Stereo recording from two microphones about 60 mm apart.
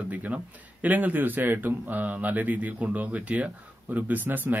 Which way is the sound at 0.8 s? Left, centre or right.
Right.